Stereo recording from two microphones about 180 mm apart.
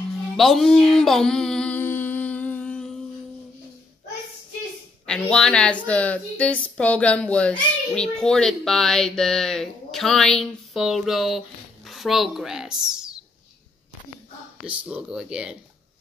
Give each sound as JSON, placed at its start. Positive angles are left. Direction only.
{"t": 0.4, "sound": "a sound", "side_deg": 0}
{"t": 5.0, "sound": "a woman's voice", "side_deg": 5}
{"t": 14.6, "sound": "a woman's voice", "side_deg": -5}